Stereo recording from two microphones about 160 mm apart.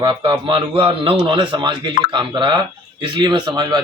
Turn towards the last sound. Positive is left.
turn(degrees=-25)  # may be behind; listen again after turning